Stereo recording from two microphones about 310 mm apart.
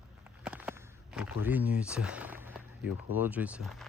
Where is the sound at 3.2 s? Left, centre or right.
Centre.